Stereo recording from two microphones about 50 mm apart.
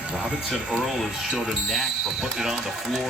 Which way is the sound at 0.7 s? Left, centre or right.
Centre.